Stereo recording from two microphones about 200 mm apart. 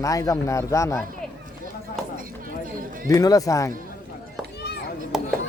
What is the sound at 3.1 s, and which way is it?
Speech, 15° left (ahead or behind).